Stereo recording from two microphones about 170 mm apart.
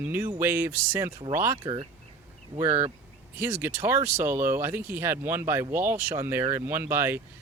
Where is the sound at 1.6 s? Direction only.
30° right (ahead or behind).